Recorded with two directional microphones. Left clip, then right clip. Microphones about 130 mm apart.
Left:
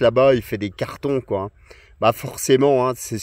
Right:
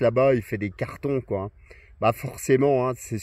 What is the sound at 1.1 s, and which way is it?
Speech, 45° left (ahead or behind).